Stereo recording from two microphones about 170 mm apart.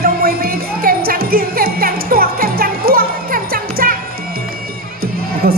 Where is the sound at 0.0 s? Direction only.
60° right (ahead or behind).